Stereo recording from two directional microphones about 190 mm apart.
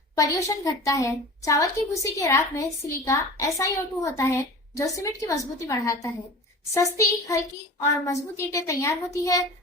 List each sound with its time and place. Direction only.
0.2 s a woman's voice: 15° left (ahead or behind)